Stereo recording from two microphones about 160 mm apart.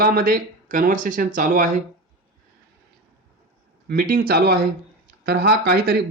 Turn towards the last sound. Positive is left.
turn(degrees=-85)